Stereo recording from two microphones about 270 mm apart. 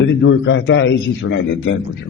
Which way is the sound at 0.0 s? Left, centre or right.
Left.